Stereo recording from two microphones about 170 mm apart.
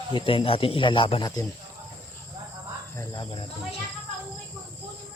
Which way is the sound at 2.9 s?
25° left (ahead or behind).